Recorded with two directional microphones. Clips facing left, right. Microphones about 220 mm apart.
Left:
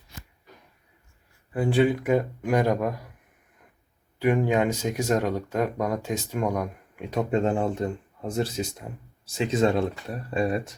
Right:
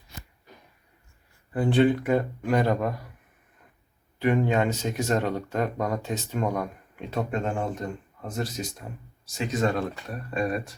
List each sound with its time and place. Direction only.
1.5 s speech: 10° left (ahead or behind)
4.2 s speech: 10° left (ahead or behind)
7.3 s speech: 30° left (ahead or behind)